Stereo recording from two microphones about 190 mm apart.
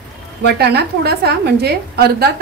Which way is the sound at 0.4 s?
60° right (ahead or behind).